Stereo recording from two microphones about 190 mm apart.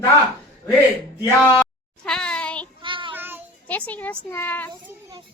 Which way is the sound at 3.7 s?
10° left (ahead or behind).